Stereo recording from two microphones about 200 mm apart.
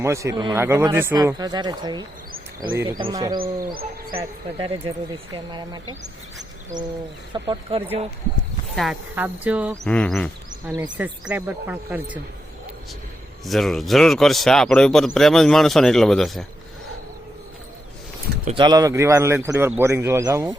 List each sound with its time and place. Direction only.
0.0 s speech: 15° right (ahead or behind)
8.7 s speech: centre (ahead or behind)
9.9 s a man's voice: 5° left (ahead or behind)
10.9 s speech: 5° right (ahead or behind)
13.4 s a man's voice: centre (ahead or behind)
18.4 s speech: 25° right (ahead or behind)